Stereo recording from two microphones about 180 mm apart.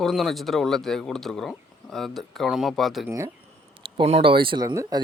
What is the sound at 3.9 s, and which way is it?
Speech, 30° right (ahead or behind).